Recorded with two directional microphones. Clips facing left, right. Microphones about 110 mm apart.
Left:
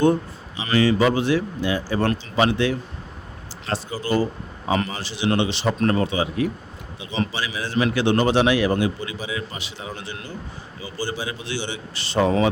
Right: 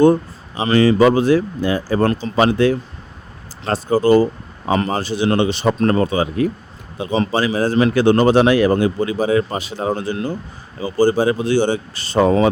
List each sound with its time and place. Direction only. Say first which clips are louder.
0.0 s a man's voice: right 6 dB; 45° right (ahead or behind)